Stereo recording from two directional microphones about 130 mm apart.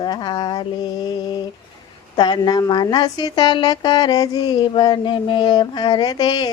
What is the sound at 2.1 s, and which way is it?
Speech, 35° left (ahead or behind).